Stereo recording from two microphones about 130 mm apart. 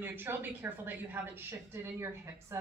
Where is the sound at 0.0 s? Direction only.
15° right (ahead or behind).